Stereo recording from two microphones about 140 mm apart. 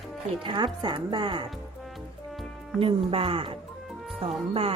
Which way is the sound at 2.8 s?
40° right (ahead or behind).